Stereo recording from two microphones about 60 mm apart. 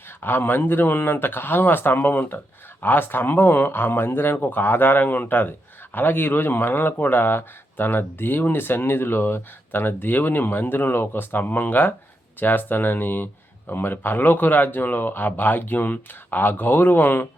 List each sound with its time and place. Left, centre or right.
0.2 s speech: left